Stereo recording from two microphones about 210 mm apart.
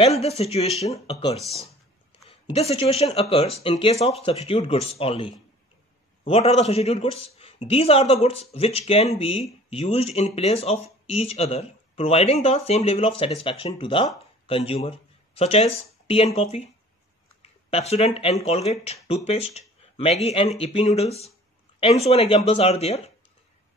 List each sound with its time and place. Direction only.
0.2 s speech: 30° left (ahead or behind)
2.2 s speech: 30° left (ahead or behind)